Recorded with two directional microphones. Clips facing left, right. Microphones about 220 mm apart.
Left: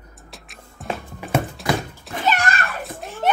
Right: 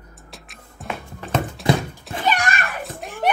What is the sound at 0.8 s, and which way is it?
Music, centre (ahead or behind).